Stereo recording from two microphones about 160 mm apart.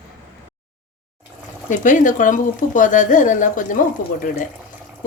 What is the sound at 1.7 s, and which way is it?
A woman's voice, 55° left (ahead or behind).